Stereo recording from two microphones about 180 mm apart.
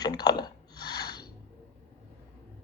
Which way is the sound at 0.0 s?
20° left (ahead or behind).